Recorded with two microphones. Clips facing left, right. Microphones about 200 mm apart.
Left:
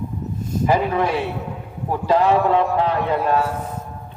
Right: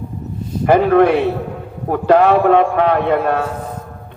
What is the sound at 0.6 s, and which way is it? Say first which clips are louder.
A man's voice: right 8 dB; 65° right (ahead or behind).